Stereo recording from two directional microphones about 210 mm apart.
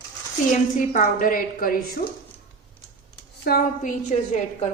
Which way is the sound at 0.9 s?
40° left (ahead or behind).